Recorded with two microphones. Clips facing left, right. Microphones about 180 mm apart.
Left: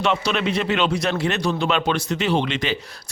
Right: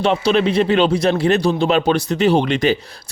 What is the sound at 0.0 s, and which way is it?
Speech, 35° right (ahead or behind).